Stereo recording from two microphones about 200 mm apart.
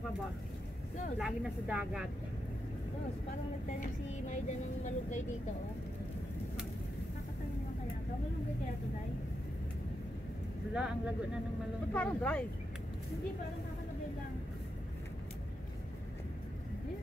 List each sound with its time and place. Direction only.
1.2 s speech: 5° right (ahead or behind)
3.8 s speech: 35° left (ahead or behind)
10.7 s speech: 5° right (ahead or behind)
11.9 s speech: 10° left (ahead or behind)